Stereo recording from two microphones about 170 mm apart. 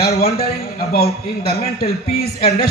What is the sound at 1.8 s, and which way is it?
Speech, 65° left (ahead or behind).